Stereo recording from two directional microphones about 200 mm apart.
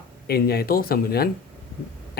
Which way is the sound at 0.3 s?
50° left (ahead or behind).